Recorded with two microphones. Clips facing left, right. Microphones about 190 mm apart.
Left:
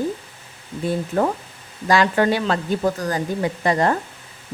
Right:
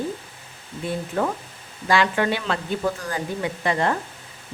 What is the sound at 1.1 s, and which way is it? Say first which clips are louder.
Speech: left 4 dB; 35° left (ahead or behind).